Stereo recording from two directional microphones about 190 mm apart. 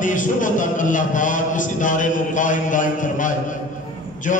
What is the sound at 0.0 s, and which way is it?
A man's voice, 45° left (ahead or behind).